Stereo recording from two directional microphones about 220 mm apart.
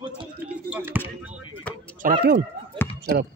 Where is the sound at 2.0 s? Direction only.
40° right (ahead or behind).